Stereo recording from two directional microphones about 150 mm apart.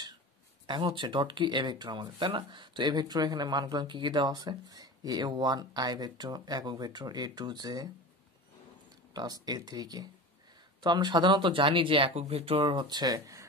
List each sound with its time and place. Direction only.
0.7 s speech: 30° right (ahead or behind)
9.1 s speech: 25° right (ahead or behind)